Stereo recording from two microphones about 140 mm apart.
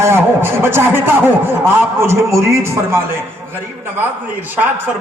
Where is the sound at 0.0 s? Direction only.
15° right (ahead or behind).